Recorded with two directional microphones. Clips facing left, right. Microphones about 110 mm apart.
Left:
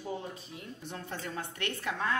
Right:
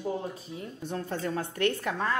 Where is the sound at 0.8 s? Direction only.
35° right (ahead or behind).